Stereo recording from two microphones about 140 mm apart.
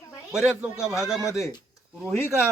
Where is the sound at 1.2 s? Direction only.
20° left (ahead or behind).